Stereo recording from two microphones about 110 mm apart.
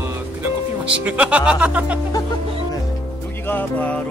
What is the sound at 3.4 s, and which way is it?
Music, 15° left (ahead or behind).